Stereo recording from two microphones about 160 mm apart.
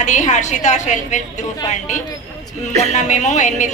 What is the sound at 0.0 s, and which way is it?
A man's voice, 50° left (ahead or behind).